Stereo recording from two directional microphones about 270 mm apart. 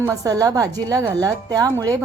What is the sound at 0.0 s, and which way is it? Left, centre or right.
A woman's voice, centre.